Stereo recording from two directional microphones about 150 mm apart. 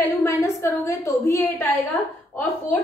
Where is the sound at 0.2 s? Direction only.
20° left (ahead or behind).